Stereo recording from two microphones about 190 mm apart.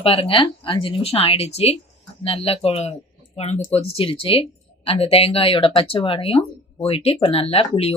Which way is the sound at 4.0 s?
30° left (ahead or behind).